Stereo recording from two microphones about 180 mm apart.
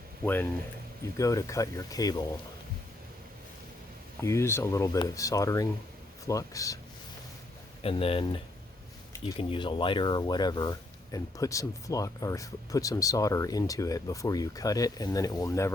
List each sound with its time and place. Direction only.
1.1 s speech: 20° left (ahead or behind)
4.2 s speech: 15° left (ahead or behind)
7.8 s speech: 30° left (ahead or behind); by 15.7 s 15° left (ahead or behind)